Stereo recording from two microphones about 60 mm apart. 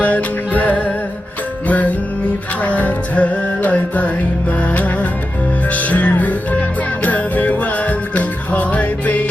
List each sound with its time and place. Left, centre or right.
0.0 s music: left